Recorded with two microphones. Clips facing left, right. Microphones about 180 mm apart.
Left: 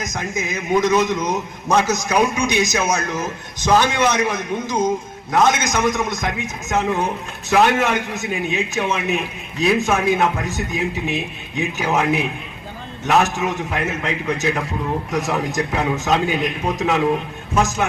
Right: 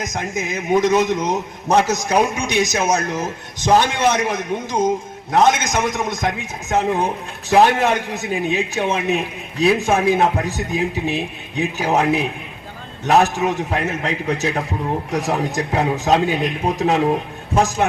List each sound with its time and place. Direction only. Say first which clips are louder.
0.0 s a man's voice: right 1 dB; 35° right (ahead or behind)
13.1 s a man's voice: right 2 dB; 35° right (ahead or behind)